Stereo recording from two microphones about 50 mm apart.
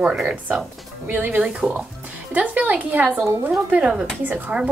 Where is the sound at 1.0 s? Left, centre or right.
Right.